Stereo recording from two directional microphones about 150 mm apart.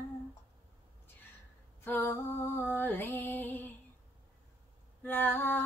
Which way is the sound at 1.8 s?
15° left (ahead or behind).